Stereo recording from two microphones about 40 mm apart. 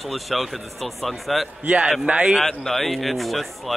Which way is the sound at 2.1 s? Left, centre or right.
Right.